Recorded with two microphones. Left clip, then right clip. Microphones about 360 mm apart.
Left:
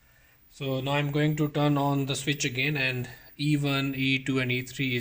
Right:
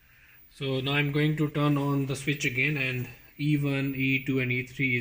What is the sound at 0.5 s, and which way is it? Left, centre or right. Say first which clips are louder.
A man's voice: even; left.